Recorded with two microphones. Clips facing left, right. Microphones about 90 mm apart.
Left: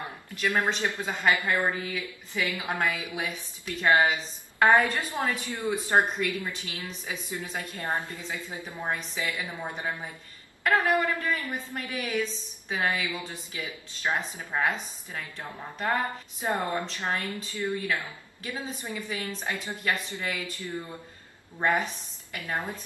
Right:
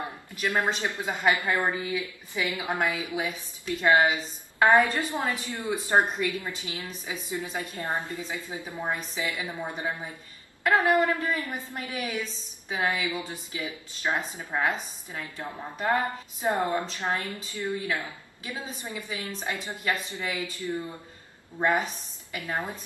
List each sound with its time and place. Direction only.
0.4 s a woman's voice: 15° right (ahead or behind)
10.6 s a woman's voice: 20° right (ahead or behind)
22.3 s a woman's voice: 15° right (ahead or behind)